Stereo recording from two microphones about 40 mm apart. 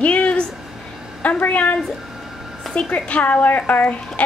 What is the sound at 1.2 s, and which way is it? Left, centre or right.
Speech, left.